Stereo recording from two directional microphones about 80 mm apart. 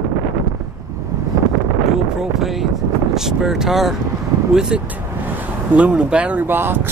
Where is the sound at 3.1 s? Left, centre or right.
Centre.